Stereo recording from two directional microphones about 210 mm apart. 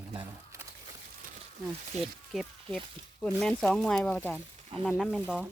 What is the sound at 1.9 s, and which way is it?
Speech, 35° right (ahead or behind).